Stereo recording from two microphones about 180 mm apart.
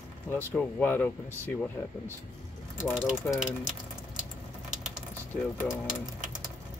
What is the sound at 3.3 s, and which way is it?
Speech, 10° left (ahead or behind).